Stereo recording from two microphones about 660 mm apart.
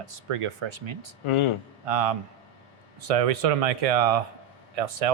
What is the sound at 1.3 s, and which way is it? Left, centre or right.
Speech, left.